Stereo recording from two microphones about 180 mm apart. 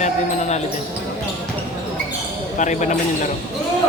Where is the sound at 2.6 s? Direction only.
40° left (ahead or behind).